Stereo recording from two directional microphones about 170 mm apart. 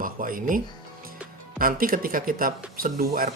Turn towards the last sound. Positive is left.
turn(degrees=-60)  # may be behind; listen again after turning